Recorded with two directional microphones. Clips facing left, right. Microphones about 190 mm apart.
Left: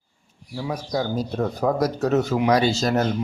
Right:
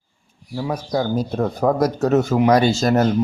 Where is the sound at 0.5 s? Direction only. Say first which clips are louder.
Right 4 dB; 55° right (ahead or behind).